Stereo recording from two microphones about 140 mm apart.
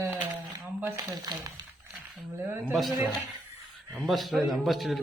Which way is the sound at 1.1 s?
25° right (ahead or behind).